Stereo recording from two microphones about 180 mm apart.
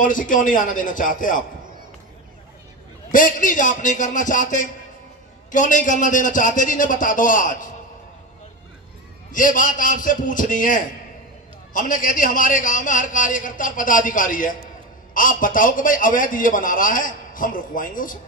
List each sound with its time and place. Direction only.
0.0 s a man's voice: 50° left (ahead or behind)
3.1 s a man's voice: 45° left (ahead or behind)
9.3 s a man's voice: 50° left (ahead or behind)